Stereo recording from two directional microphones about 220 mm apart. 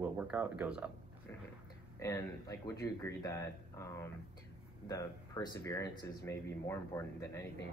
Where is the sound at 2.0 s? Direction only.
15° left (ahead or behind).